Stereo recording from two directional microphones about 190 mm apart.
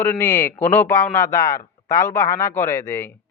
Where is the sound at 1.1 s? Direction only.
45° left (ahead or behind).